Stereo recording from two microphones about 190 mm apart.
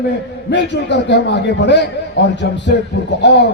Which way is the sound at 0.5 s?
65° left (ahead or behind).